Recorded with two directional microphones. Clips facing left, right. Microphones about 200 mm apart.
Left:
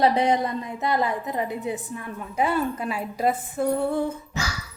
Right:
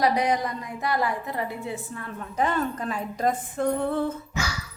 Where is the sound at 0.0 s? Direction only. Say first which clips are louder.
Left 3 dB; 25° left (ahead or behind).